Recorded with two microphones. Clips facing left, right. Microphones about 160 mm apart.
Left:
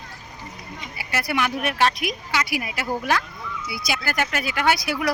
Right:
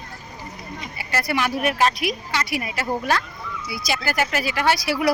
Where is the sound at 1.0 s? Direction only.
Centre (ahead or behind).